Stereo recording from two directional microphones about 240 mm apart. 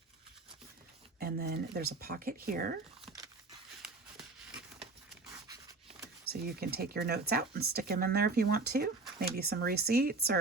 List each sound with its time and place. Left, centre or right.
1.2 s speech: right
6.2 s speech: right